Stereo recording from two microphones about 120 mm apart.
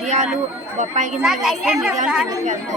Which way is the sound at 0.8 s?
85° right.